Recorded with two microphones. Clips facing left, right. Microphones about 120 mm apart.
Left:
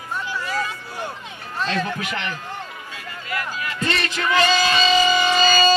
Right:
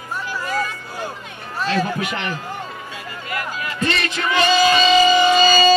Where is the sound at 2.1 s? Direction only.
30° right (ahead or behind).